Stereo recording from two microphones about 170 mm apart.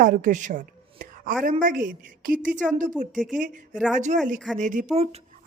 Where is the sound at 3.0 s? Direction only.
10° right (ahead or behind).